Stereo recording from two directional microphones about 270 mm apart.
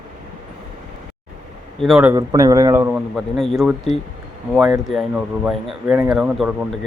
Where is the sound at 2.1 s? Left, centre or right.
Centre.